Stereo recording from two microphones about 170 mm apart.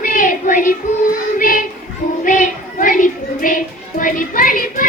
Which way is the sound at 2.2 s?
50° left (ahead or behind).